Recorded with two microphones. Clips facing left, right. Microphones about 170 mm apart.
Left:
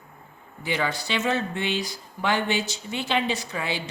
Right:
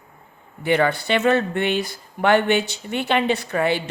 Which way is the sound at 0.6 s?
60° right (ahead or behind).